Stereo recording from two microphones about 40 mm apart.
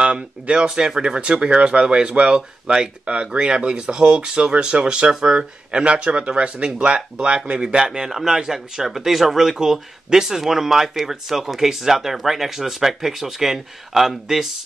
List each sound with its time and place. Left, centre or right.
0.0 s speech: right